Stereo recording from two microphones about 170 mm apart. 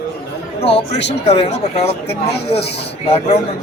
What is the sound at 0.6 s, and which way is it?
Speech, 85° left.